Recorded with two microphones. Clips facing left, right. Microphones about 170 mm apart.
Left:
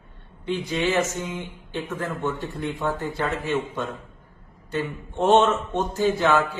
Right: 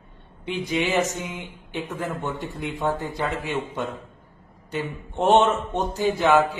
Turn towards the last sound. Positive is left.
turn(degrees=-15)  # may be behind; listen again after turning